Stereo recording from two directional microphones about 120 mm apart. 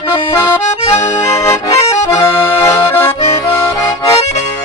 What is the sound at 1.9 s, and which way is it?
Accordion, 20° left (ahead or behind).